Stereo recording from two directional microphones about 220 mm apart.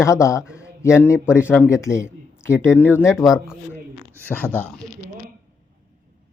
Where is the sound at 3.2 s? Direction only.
5° right (ahead or behind).